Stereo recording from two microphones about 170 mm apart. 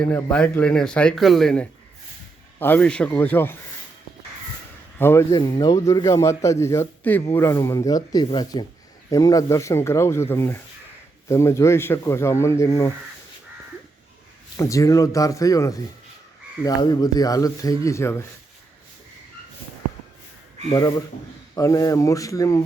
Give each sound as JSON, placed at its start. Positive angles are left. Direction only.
{"t": 0.0, "sound": "speech", "side_deg": 5}
{"t": 4.9, "sound": "speech", "side_deg": 15}
{"t": 5.4, "sound": "speech", "side_deg": 25}
{"t": 14.5, "sound": "speech", "side_deg": 20}
{"t": 20.7, "sound": "speech", "side_deg": 20}